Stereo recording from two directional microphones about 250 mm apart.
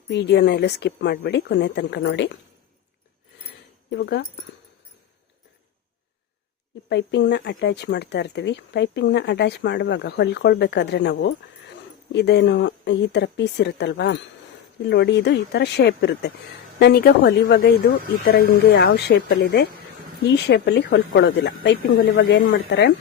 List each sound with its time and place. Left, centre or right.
0.1 s speech: left
3.8 s speech: left
6.8 s speech: left